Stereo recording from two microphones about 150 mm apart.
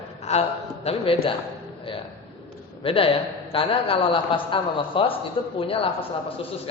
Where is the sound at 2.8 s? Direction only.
35° left (ahead or behind).